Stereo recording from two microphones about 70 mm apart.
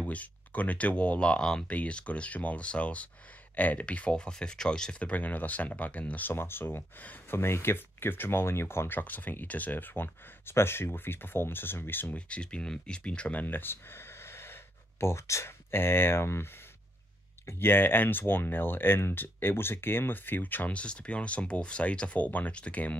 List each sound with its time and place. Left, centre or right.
0.0 s speech: left
12.2 s speech: centre; by 16.4 s left
17.5 s speech: left